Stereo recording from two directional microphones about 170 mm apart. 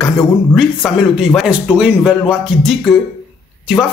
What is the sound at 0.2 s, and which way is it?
Speech, centre (ahead or behind).